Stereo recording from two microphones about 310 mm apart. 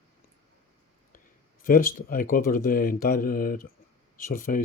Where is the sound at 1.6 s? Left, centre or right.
Left.